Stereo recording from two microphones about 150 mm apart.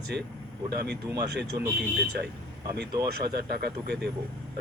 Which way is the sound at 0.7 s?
90° right.